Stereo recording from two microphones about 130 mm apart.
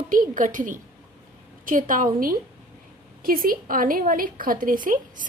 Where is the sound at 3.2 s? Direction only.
90° right.